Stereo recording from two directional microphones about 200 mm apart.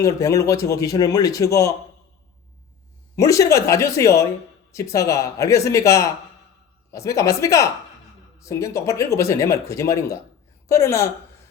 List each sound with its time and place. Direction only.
0.0 s speech: 15° left (ahead or behind)
3.2 s speech: 15° left (ahead or behind)